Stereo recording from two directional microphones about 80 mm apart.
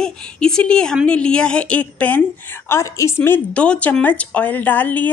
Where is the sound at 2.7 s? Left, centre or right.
Left.